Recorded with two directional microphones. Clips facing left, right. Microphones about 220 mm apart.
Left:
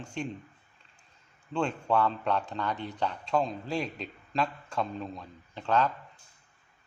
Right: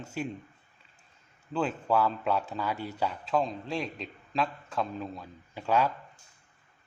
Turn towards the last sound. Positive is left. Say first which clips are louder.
# even
turn(degrees=-10)  # may be behind; listen again after turning